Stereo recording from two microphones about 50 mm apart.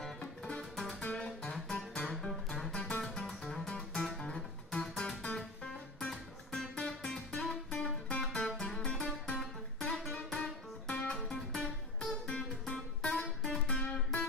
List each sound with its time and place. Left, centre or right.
0.0 s music: centre
3.6 s music: centre
4.0 s music: centre
4.7 s music: left